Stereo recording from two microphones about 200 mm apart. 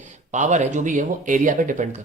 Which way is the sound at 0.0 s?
40° right (ahead or behind).